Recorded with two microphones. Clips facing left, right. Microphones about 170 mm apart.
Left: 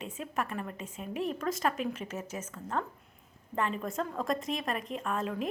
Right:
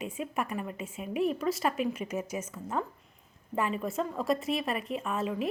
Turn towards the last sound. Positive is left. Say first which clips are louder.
# right 2 dB
turn(degrees=-5)  # may be behind; listen again after turning